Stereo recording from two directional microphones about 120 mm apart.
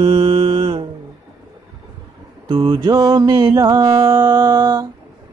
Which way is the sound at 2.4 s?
45° right (ahead or behind).